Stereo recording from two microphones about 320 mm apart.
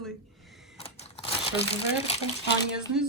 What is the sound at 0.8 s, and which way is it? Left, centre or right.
Crumpling, centre.